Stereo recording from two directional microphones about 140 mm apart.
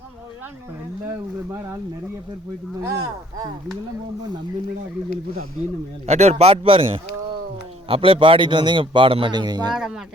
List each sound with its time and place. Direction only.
6.1 s a man's voice: 50° right (ahead or behind); by 9.7 s 30° right (ahead or behind)
9.7 s speech: 5° right (ahead or behind)